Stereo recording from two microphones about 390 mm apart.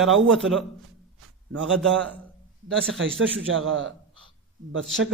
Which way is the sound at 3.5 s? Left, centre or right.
Right.